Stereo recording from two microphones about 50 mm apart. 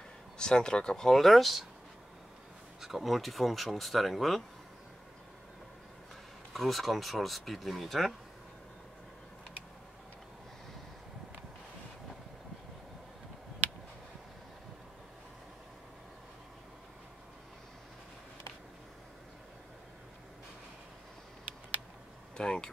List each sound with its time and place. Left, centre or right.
0.4 s speech: centre
2.8 s speech: centre
6.5 s speech: centre
22.4 s a sound: centre